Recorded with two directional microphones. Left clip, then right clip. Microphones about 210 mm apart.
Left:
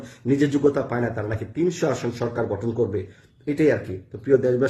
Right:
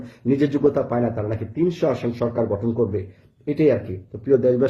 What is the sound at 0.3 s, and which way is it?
Speech, 15° left (ahead or behind).